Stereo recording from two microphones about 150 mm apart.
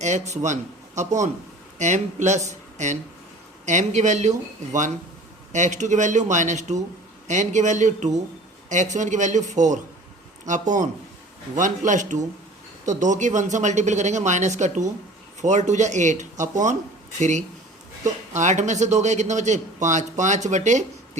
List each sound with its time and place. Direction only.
0.0 s speech: 50° right (ahead or behind)
5.5 s speech: 55° right (ahead or behind)
11.9 s speech: 55° right (ahead or behind)